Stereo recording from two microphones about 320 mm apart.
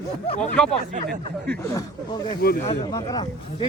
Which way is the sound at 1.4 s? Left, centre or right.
Centre.